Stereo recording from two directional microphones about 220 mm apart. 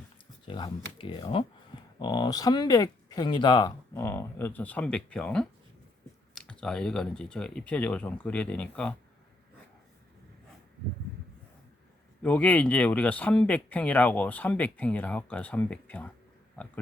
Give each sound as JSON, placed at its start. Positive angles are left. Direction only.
{"t": 0.4, "sound": "speech", "side_deg": 20}
{"t": 12.2, "sound": "speech", "side_deg": 5}